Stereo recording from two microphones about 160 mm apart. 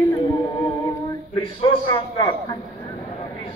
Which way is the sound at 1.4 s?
30° left (ahead or behind).